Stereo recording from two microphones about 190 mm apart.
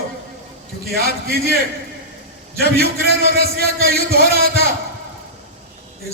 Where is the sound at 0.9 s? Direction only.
55° right (ahead or behind).